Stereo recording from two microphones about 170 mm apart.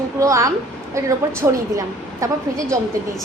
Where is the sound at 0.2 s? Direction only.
20° right (ahead or behind).